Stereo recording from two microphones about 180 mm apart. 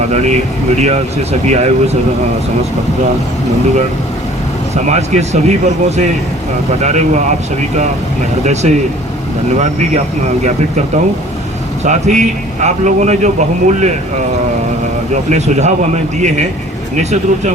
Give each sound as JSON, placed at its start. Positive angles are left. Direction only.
{"t": 0.8, "sound": "a man's voice", "side_deg": -40}
{"t": 4.9, "sound": "a man's voice", "side_deg": -40}
{"t": 10.4, "sound": "a man's voice", "side_deg": -40}
{"t": 15.1, "sound": "a man's voice", "side_deg": -40}